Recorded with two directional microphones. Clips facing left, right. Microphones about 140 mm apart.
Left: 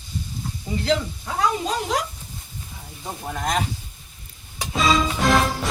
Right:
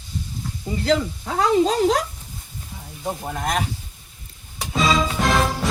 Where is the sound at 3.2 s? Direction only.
5° right (ahead or behind).